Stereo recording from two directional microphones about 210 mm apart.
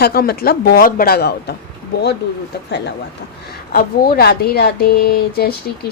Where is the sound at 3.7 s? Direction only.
45° left (ahead or behind).